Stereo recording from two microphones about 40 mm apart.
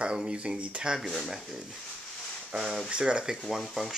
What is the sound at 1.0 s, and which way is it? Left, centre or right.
Speech, centre.